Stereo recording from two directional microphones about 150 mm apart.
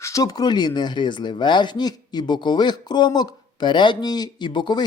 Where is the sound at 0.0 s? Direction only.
20° left (ahead or behind).